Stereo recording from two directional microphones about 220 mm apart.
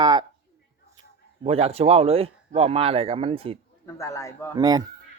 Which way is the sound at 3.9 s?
15° left (ahead or behind).